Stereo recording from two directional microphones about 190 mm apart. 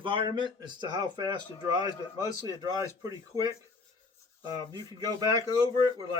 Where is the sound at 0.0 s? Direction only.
25° right (ahead or behind).